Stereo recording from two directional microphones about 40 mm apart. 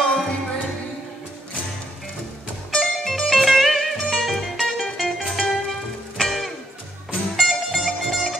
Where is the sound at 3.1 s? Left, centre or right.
Centre.